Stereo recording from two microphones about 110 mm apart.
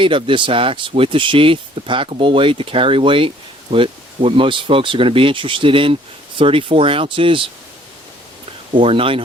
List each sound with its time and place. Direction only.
0.0 s speech: 50° right (ahead or behind)
8.7 s speech: 55° right (ahead or behind)